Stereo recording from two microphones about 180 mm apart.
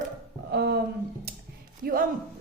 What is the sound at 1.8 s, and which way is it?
Speech, 55° right (ahead or behind).